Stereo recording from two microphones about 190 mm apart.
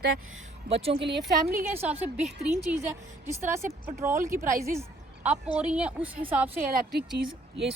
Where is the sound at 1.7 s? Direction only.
10° right (ahead or behind).